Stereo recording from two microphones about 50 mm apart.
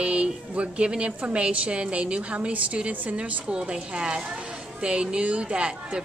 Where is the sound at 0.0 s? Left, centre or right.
Right.